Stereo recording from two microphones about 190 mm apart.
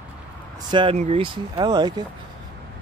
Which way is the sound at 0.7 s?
25° right (ahead or behind).